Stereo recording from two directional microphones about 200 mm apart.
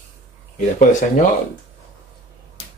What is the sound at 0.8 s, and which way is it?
Speech, 40° left (ahead or behind).